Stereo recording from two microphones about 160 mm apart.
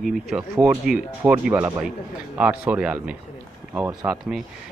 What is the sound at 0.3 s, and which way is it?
Speech, 5° right (ahead or behind).